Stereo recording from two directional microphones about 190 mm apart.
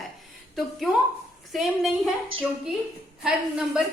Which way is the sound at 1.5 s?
Centre (ahead or behind).